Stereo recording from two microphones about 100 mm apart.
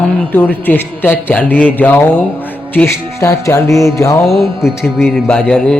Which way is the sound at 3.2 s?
30° left (ahead or behind).